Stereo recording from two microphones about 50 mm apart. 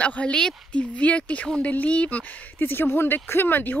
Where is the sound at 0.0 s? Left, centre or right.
Left.